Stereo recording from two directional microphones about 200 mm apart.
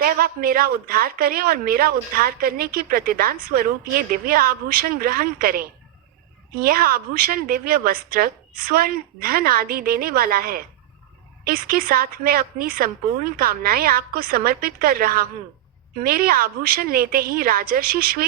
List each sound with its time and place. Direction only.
0.0 s a woman's voice: 45° right (ahead or behind)